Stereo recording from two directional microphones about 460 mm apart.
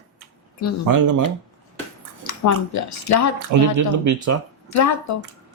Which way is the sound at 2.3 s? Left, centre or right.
Left.